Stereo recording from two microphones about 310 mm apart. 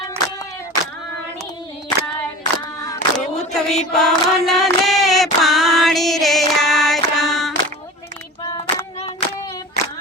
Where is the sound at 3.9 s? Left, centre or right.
Centre.